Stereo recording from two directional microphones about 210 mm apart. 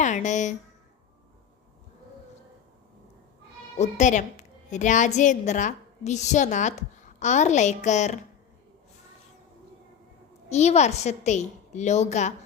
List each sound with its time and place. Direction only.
0.0 s a woman's voice: 35° left (ahead or behind)
3.8 s a woman's voice: 35° left (ahead or behind)
10.5 s a woman's voice: 30° left (ahead or behind)